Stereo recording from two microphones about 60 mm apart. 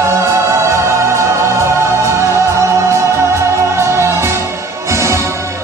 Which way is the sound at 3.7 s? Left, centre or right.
Right.